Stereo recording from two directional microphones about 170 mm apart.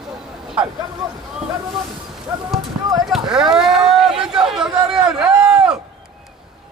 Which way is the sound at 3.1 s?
5° right (ahead or behind).